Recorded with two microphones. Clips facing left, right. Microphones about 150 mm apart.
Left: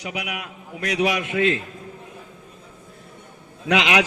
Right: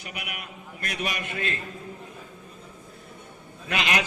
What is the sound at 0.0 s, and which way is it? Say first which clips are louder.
A man's voice: left 8 dB; 90° left.